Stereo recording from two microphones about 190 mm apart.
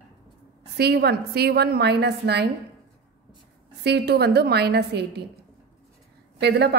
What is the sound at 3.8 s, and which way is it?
A woman's voice, 60° right (ahead or behind).